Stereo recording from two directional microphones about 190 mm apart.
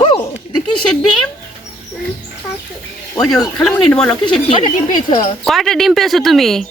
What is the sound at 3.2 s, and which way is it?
A man's voice, 5° left (ahead or behind).